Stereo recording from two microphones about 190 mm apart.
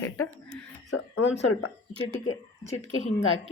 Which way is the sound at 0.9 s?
90° left.